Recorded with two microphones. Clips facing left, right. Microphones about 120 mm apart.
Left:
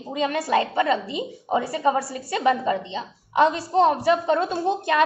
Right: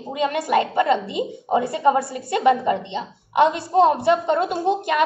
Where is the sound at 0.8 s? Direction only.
25° right (ahead or behind).